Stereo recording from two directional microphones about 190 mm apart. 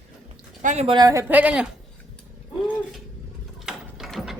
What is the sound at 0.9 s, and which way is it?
Speech, 15° right (ahead or behind).